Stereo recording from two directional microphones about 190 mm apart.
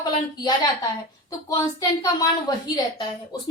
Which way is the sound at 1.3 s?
20° left (ahead or behind).